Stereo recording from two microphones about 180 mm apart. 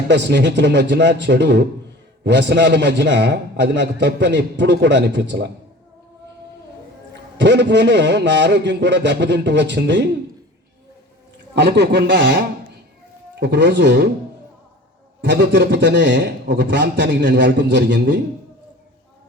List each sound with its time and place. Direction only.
0.1 s a man's voice: 75° right (ahead or behind)
7.1 s a man's voice: 80° right
11.5 s a man's voice: 70° right (ahead or behind)
15.2 s a man's voice: 75° right (ahead or behind)